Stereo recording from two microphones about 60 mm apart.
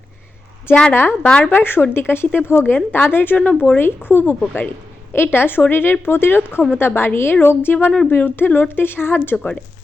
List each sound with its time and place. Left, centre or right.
0.9 s speech: left